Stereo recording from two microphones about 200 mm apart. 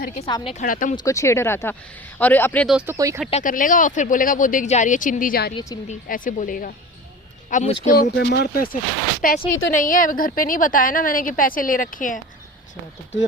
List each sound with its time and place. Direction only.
0.2 s a woman's voice: 25° left (ahead or behind)
0.6 s a woman's voice: 40° left (ahead or behind)
0.9 s speech: 15° left (ahead or behind)
2.7 s speech: 10° right (ahead or behind)
3.4 s speech: 40° left (ahead or behind)
5.5 s a woman's voice: 20° left (ahead or behind)
5.9 s a woman's voice: 40° left (ahead or behind)
7.9 s a woman's voice: 55° left (ahead or behind)